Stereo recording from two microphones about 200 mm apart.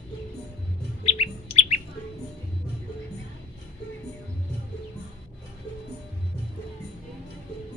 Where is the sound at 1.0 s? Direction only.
30° left (ahead or behind).